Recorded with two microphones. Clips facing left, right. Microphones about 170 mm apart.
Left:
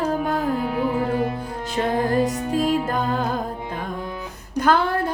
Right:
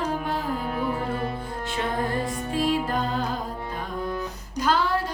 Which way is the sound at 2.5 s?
45° left (ahead or behind).